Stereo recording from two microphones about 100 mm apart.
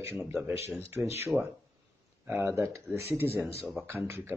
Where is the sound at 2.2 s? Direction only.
20° right (ahead or behind).